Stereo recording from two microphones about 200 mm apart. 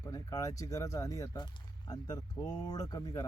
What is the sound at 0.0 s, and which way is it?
Speech, 20° left (ahead or behind).